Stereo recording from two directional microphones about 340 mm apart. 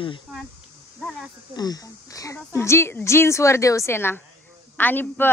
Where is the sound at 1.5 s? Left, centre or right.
Centre.